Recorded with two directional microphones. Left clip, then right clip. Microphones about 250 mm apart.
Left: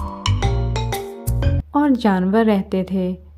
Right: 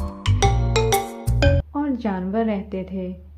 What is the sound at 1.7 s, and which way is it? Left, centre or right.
Speech, left.